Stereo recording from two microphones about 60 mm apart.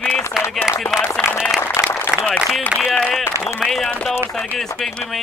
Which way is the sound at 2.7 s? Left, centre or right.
Centre.